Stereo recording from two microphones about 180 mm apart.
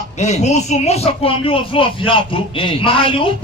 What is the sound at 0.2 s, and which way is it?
Speech, 40° left (ahead or behind).